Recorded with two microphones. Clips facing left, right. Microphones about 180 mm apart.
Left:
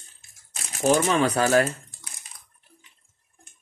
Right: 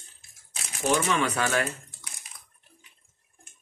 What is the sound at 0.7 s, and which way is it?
Speech, 40° left (ahead or behind).